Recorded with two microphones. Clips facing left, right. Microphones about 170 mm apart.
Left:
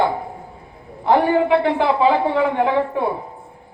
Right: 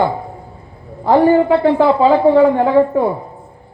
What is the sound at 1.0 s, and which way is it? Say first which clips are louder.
A woman's voice: right 5 dB; 40° right (ahead or behind).